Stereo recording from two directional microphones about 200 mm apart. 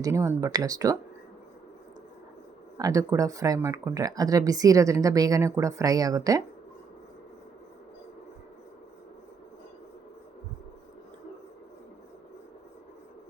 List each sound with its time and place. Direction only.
0.0 s speech: 15° right (ahead or behind)
2.7 s speech: 20° right (ahead or behind)